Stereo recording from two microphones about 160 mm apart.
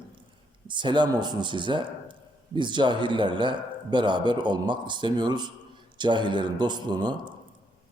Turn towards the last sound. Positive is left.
turn(degrees=-25)  # may be behind; listen again after turning